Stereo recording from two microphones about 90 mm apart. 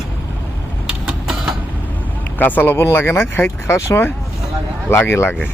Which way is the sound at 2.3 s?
20° left (ahead or behind).